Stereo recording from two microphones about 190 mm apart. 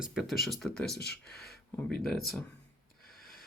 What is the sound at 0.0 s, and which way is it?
Speech, centre (ahead or behind).